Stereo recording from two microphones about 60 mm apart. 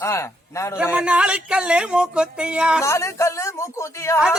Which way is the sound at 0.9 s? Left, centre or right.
Centre.